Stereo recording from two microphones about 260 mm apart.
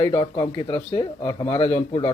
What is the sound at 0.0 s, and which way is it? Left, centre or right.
Speech, centre.